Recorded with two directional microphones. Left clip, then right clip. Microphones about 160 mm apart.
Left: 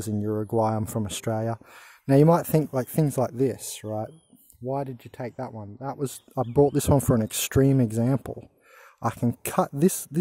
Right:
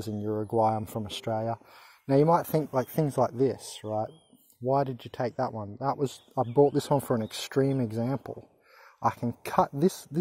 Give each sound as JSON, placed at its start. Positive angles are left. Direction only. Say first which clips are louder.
{"t": 0.0, "sound": "speech", "louder": "left 3 dB", "side_deg": 35}
{"t": 4.6, "sound": "speech", "louder": "right 3 dB", "side_deg": 0}
{"t": 5.9, "sound": "speech", "louder": "even", "side_deg": 30}